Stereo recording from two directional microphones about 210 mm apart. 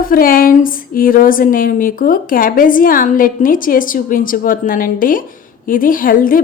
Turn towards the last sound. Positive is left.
turn(degrees=40)  # may be behind; listen again after turning